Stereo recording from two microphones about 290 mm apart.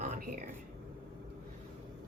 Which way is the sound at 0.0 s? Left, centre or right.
Right.